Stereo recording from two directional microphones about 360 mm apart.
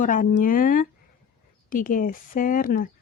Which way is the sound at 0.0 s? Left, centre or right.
Left.